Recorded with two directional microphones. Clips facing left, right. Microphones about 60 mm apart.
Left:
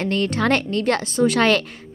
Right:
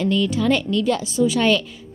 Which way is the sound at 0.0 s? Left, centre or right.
Left.